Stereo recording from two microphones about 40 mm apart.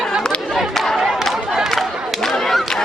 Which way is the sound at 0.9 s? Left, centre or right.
Centre.